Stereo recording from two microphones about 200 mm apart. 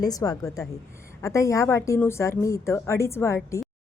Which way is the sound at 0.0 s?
20° left (ahead or behind).